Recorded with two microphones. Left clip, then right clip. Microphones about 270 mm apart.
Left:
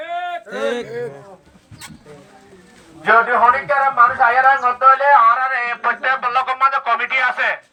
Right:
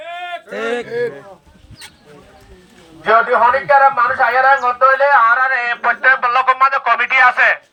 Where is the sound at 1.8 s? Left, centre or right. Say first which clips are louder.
Left 1 dB; left.